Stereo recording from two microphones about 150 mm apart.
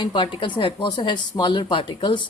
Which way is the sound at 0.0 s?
30° left (ahead or behind).